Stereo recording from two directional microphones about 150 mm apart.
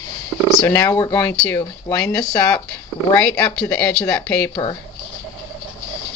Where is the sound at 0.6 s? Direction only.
20° left (ahead or behind).